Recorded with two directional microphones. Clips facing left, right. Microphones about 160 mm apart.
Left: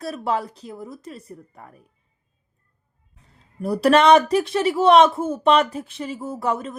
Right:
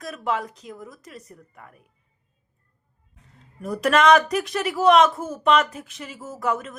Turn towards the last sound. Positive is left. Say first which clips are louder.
# left 2 dB
turn(degrees=30)  # may be behind; listen again after turning